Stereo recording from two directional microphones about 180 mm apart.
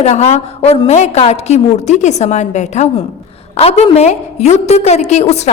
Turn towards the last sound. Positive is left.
turn(degrees=35)  # may be behind; listen again after turning